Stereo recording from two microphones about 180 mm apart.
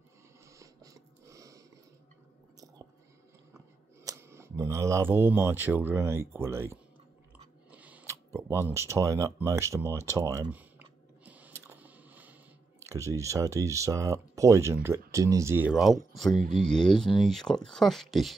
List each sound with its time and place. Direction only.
0.5 s a sound: 20° right (ahead or behind)
4.0 s speech: 15° right (ahead or behind)
7.7 s biting: 10° right (ahead or behind)
8.5 s speech: 15° right (ahead or behind)
11.2 s a sound: 10° right (ahead or behind)
12.8 s speech: 15° right (ahead or behind); by 18.3 s centre (ahead or behind)